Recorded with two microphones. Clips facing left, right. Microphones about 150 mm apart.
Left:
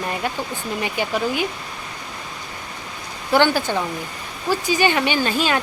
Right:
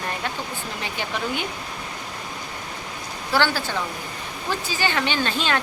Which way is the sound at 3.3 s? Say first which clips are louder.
Left 5 dB; 15° left (ahead or behind).